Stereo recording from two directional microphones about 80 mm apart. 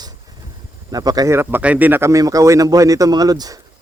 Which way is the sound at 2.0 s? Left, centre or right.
Right.